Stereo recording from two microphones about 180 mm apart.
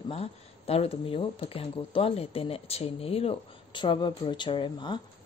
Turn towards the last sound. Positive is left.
turn(degrees=25)  # may be behind; listen again after turning